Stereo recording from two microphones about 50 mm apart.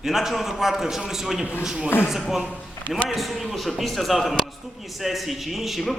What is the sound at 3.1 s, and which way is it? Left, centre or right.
A man's voice, centre.